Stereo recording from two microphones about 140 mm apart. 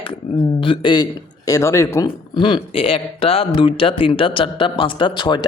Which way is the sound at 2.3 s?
35° left (ahead or behind).